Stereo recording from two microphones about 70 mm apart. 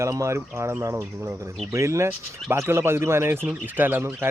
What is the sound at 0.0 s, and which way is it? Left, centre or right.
Speech, right.